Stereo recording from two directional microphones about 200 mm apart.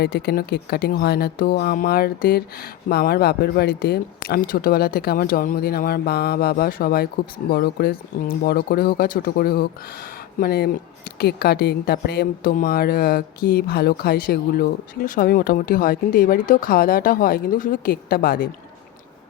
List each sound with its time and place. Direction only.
0.0 s speech: 50° left (ahead or behind)